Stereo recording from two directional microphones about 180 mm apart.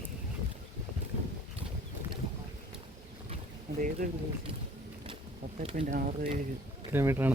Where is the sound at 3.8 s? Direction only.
45° right (ahead or behind).